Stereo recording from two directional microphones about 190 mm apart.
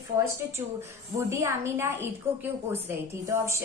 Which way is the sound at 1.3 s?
15° right (ahead or behind).